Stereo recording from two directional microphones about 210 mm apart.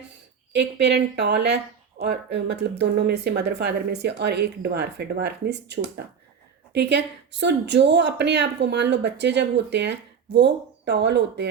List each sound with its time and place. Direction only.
0.5 s speech: 55° right (ahead or behind)